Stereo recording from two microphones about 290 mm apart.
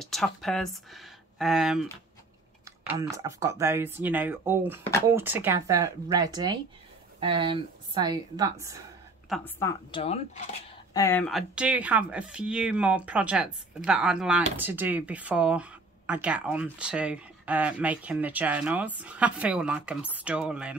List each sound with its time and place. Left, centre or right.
0.0 s speech: centre
2.9 s speech: centre
9.3 s a woman's voice: centre
9.8 s speech: centre
11.0 s speech: centre